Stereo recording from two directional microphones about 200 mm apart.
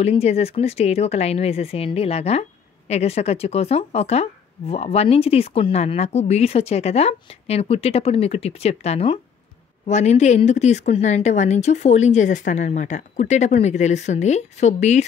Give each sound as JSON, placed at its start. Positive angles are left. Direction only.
{"t": 0.0, "sound": "speech", "side_deg": 30}